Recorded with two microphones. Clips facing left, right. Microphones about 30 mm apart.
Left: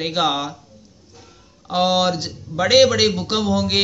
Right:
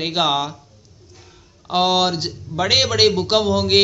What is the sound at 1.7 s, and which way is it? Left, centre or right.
A man's voice, right.